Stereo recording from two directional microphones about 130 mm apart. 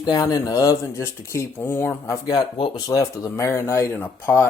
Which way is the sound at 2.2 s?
30° left (ahead or behind).